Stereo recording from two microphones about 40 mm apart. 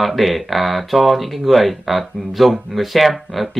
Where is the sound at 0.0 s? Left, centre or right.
Centre.